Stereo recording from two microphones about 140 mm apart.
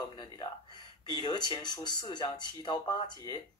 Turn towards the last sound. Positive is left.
turn(degrees=30)  # may be behind; listen again after turning